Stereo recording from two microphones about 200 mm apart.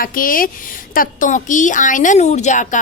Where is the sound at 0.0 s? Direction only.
45° left (ahead or behind).